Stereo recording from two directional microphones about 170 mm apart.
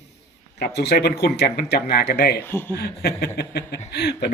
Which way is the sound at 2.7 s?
70° left (ahead or behind).